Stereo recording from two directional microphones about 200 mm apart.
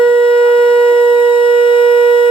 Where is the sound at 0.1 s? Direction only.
25° left (ahead or behind).